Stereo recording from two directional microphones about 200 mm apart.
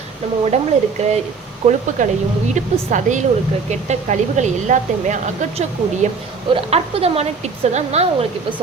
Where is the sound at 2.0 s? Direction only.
40° right (ahead or behind).